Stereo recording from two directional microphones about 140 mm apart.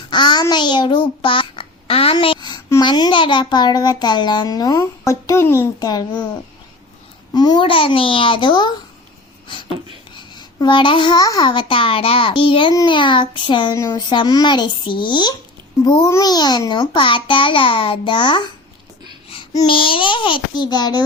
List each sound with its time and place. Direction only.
0.1 s a child's voice: 30° left (ahead or behind)
7.3 s a child's voice: 30° left (ahead or behind)
10.2 s a child's voice: 30° left (ahead or behind)